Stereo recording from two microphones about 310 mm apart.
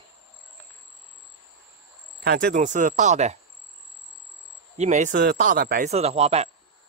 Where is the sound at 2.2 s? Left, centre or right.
Right.